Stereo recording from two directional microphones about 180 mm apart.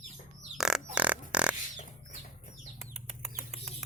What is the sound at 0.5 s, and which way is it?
Music, 5° right (ahead or behind).